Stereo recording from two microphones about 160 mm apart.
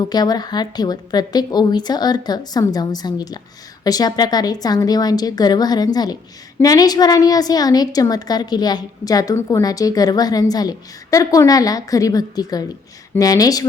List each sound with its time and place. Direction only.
0.1 s a woman's voice: 25° left (ahead or behind)